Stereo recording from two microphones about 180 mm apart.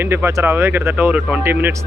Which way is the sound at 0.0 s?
10° right (ahead or behind).